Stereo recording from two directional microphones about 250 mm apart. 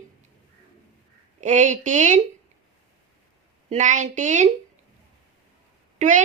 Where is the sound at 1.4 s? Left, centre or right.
Right.